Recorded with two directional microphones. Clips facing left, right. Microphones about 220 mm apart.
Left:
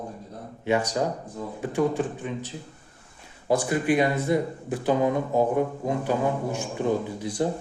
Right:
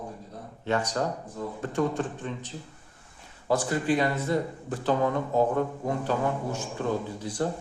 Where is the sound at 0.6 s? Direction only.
10° left (ahead or behind).